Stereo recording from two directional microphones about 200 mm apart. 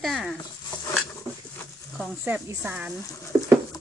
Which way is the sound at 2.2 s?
10° right (ahead or behind).